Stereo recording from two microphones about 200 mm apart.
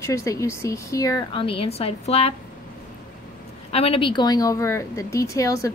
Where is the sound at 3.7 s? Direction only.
30° left (ahead or behind).